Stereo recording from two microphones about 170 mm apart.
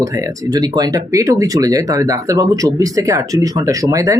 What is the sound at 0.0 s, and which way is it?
Speech, 20° right (ahead or behind).